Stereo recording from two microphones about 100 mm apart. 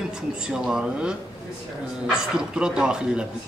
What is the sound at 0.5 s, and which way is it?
Speech, 5° right (ahead or behind).